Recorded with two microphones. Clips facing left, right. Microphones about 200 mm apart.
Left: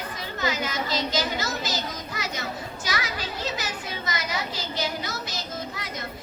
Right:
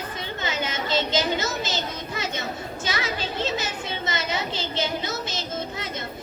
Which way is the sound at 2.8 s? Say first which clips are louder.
Right 3 dB; 25° right (ahead or behind).